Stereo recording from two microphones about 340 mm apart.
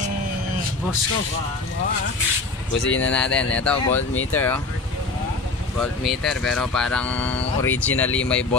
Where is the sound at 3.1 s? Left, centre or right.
Centre.